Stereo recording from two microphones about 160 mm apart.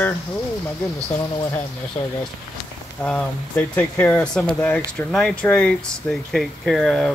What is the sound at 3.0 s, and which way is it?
Speech, 10° left (ahead or behind).